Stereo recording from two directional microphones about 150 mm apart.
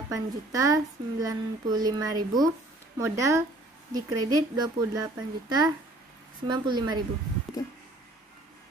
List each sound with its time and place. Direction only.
0.1 s speech: 20° right (ahead or behind)
7.6 s music: 25° left (ahead or behind)